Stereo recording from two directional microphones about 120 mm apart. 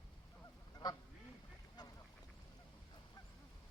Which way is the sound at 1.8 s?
35° left (ahead or behind).